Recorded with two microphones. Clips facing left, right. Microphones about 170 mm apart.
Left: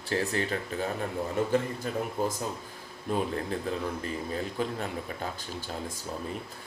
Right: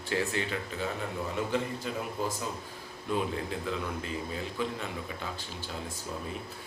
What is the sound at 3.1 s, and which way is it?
Speech, 40° left (ahead or behind).